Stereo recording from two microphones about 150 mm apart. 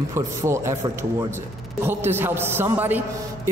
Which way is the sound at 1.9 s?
15° right (ahead or behind).